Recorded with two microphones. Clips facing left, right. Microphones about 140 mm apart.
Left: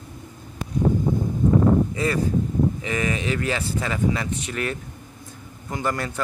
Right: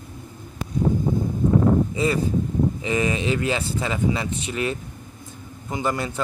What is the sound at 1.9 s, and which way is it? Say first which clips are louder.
A man's voice: right 1 dB; 20° right (ahead or behind).